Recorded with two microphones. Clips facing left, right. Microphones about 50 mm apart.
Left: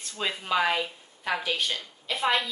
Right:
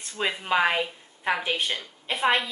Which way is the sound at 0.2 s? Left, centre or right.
Right.